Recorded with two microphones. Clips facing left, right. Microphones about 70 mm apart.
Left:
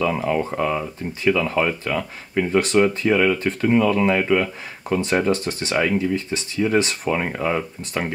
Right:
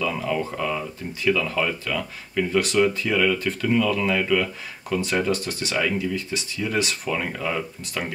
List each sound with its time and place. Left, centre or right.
0.0 s speech: left